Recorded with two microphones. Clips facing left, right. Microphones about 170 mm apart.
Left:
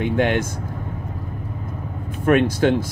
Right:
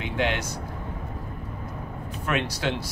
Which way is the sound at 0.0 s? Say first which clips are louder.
Left 8 dB; 50° left (ahead or behind).